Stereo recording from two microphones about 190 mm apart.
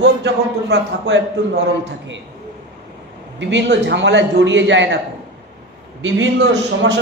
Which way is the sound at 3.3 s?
70° right (ahead or behind).